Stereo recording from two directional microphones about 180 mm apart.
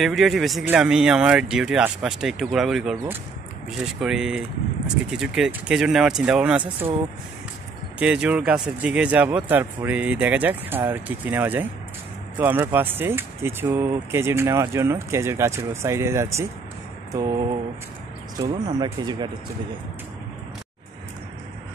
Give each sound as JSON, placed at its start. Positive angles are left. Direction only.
{"t": 0.0, "sound": "speech", "side_deg": 0}
{"t": 8.0, "sound": "speech", "side_deg": -5}